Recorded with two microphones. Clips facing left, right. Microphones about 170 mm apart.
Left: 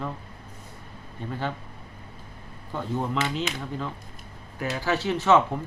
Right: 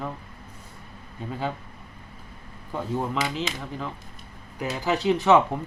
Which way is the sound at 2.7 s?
5° right (ahead or behind).